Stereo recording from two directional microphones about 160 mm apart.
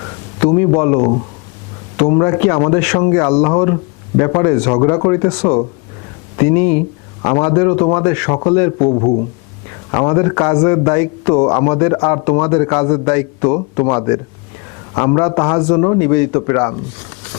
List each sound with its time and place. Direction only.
0.3 s a man's voice: 20° left (ahead or behind)